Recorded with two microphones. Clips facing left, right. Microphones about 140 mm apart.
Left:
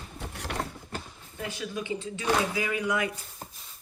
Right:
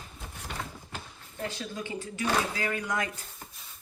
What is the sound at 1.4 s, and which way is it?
Speech, 15° left (ahead or behind).